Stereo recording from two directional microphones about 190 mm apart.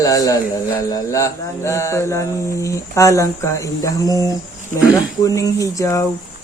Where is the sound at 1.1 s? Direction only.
15° left (ahead or behind).